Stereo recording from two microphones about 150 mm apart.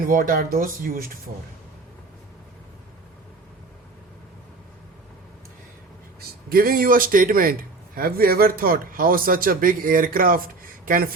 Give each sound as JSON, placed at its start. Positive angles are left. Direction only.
{"t": 0.0, "sound": "a man's voice", "side_deg": -70}
{"t": 6.1, "sound": "a man's voice", "side_deg": -75}